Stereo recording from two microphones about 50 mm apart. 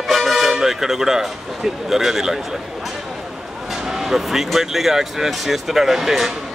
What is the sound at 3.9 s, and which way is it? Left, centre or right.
Speech, centre.